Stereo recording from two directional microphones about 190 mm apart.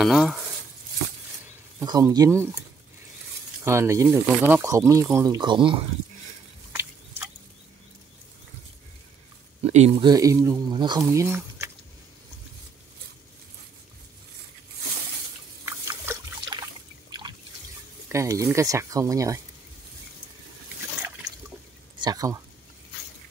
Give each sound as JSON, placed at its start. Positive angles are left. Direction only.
{"t": 0.0, "sound": "speech", "side_deg": 0}
{"t": 1.8, "sound": "speech", "side_deg": -15}
{"t": 3.6, "sound": "speech", "side_deg": -15}
{"t": 6.7, "sound": "a sound", "side_deg": -10}
{"t": 9.6, "sound": "speech", "side_deg": -35}
{"t": 15.6, "sound": "a sound", "side_deg": -10}
{"t": 18.0, "sound": "speech", "side_deg": -15}
{"t": 21.9, "sound": "speech", "side_deg": -20}